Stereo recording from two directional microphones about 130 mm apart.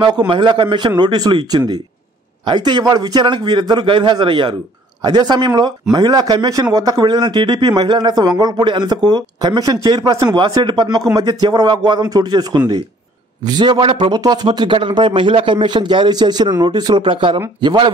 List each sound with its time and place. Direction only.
0.3 s speech: 40° right (ahead or behind)